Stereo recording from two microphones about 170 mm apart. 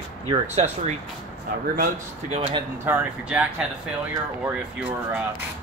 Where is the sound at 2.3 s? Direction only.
35° right (ahead or behind).